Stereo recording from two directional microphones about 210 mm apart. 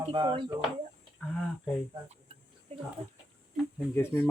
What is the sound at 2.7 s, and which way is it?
Speech, 30° right (ahead or behind).